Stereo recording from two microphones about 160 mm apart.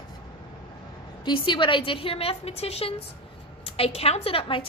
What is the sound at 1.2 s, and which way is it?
A woman's voice, 30° left (ahead or behind).